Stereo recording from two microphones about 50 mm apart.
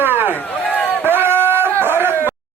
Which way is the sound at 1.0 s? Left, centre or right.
Right.